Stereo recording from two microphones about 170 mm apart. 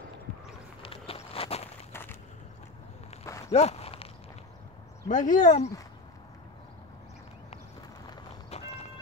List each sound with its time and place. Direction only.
0.8 s walk: 35° left (ahead or behind)
1.9 s a sound: 15° left (ahead or behind)
3.3 s a sound: 20° left (ahead or behind)
3.5 s walk: 40° left (ahead or behind)
5.0 s speech: 50° left (ahead or behind)
8.5 s vehicle: 35° left (ahead or behind)